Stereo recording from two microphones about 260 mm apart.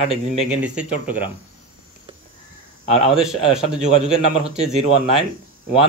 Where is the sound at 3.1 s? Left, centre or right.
Centre.